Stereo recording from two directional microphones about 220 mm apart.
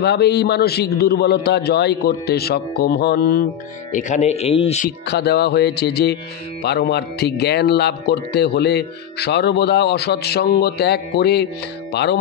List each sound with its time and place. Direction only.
0.0 s speech: 50° left (ahead or behind)
3.9 s speech: 30° left (ahead or behind)
4.8 s speech: 50° left (ahead or behind)